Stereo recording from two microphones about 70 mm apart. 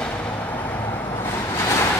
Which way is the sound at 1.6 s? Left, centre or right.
Left.